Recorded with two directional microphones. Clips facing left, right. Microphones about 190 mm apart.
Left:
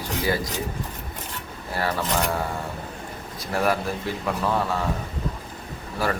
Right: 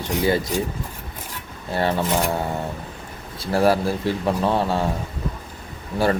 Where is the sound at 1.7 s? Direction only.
25° right (ahead or behind).